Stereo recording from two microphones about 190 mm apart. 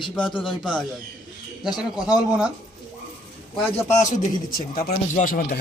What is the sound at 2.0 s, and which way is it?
Speech, 5° right (ahead or behind).